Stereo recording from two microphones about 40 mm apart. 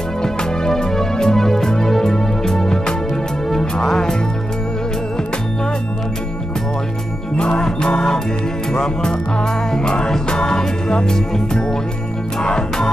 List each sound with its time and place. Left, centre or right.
0.2 s music: centre
3.8 s music: centre
7.3 s music: left
12.5 s music: centre